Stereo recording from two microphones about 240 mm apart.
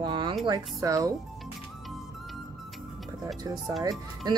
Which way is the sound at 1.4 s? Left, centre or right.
Centre.